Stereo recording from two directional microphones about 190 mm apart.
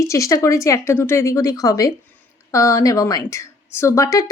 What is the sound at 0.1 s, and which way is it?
Speech, 15° left (ahead or behind).